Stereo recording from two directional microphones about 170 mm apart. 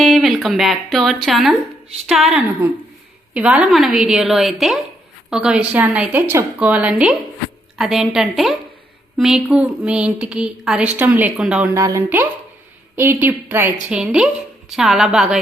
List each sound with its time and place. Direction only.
0.0 s a woman's voice: centre (ahead or behind)
11.8 s a woman's voice: 15° right (ahead or behind)